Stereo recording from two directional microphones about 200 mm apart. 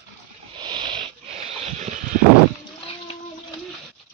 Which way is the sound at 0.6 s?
25° right (ahead or behind).